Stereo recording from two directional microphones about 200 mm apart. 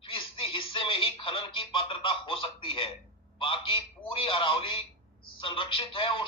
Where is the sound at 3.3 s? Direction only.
25° left (ahead or behind).